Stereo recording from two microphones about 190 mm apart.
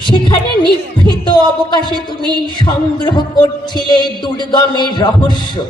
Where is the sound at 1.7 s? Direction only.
25° left (ahead or behind).